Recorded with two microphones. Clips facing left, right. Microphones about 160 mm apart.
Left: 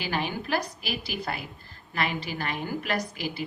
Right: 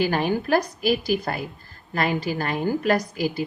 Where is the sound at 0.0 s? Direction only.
45° right (ahead or behind).